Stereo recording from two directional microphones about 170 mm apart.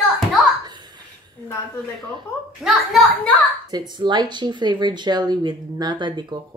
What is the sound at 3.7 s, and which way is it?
Speech, 25° right (ahead or behind).